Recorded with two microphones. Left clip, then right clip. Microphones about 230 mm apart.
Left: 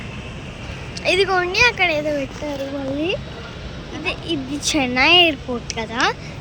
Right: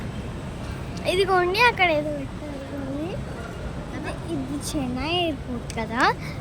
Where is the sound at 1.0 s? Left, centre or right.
Centre.